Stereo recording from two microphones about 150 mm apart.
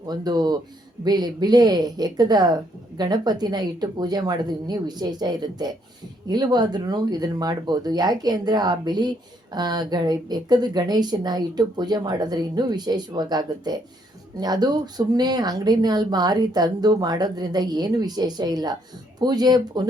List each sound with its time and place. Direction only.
0.1 s speech: 25° right (ahead or behind)